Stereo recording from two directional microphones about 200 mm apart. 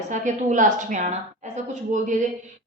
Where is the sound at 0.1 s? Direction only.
40° right (ahead or behind).